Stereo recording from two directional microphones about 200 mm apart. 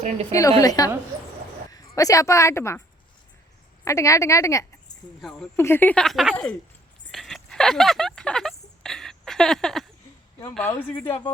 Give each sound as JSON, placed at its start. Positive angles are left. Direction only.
{"t": 0.3, "sound": "a woman's voice", "side_deg": 15}
{"t": 3.8, "sound": "a woman's voice", "side_deg": 15}
{"t": 5.2, "sound": "speech", "side_deg": 5}
{"t": 7.1, "sound": "a sound", "side_deg": 0}
{"t": 10.5, "sound": "a woman's voice", "side_deg": 10}